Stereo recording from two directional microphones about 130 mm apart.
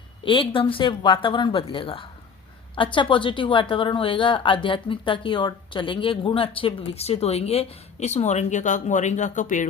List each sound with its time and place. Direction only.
0.3 s a woman's voice: 40° left (ahead or behind); by 9.6 s 75° left (ahead or behind)